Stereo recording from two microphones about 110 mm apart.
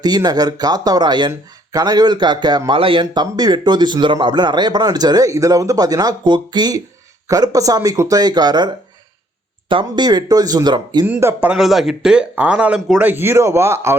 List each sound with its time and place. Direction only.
0.0 s a man's voice: 40° right (ahead or behind)
11.0 s speech: 20° right (ahead or behind)
11.4 s speech: 5° right (ahead or behind); by 13.9 s 25° right (ahead or behind)